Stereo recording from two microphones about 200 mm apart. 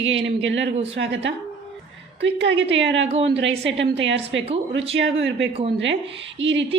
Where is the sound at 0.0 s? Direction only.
65° right (ahead or behind).